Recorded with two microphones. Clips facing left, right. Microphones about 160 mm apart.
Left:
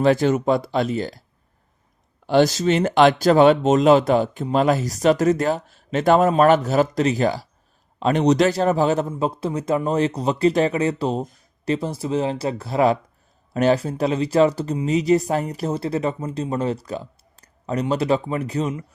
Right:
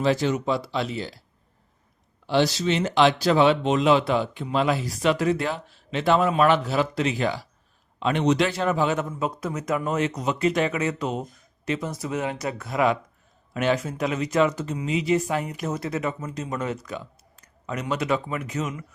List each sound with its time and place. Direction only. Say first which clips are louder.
0.0 s speech: left 5 dB; 50° left (ahead or behind)
2.2 s speech: left 5 dB; 45° left (ahead or behind); by 18.9 s 30° left (ahead or behind)